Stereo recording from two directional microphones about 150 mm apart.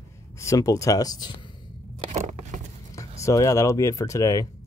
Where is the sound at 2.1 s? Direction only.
50° right (ahead or behind).